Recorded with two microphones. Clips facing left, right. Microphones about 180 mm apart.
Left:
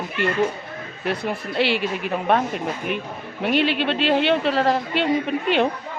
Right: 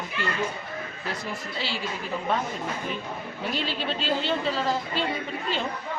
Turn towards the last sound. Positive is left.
turn(degrees=65)  # may be behind; listen again after turning